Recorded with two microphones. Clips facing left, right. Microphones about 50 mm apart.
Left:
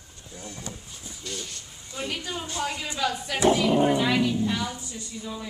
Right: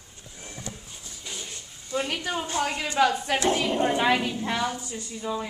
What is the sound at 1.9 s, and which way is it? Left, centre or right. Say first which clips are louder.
A woman's voice: right 4 dB; right.